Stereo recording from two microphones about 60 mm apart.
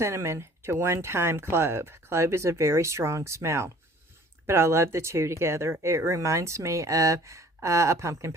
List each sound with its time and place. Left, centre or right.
0.0 s speech: right